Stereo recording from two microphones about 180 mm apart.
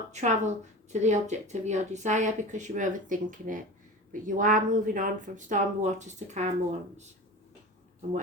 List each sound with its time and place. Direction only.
0.1 s a woman's voice: 40° right (ahead or behind)